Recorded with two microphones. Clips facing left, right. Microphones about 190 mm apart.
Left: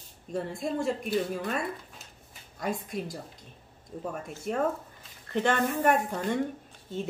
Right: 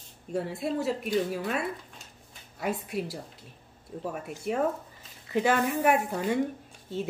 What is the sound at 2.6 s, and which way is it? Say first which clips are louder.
A woman's voice: right 1 dB; 10° right (ahead or behind).